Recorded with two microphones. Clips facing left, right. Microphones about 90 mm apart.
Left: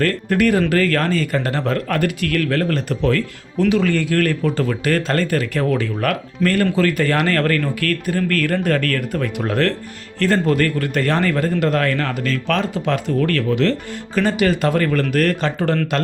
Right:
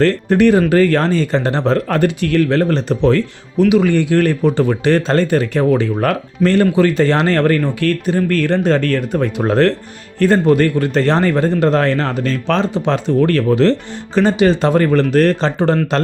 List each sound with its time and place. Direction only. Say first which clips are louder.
0.0 s a man's voice: right 5 dB; 25° right (ahead or behind)
3.6 s a man's voice: right 5 dB; 15° right (ahead or behind); by 9.7 s 30° right (ahead or behind)
10.2 s a man's voice: right 5 dB; 20° right (ahead or behind)